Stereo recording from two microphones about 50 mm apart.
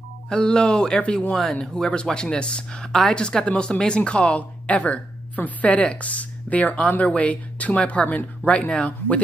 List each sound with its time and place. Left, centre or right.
0.3 s speech: centre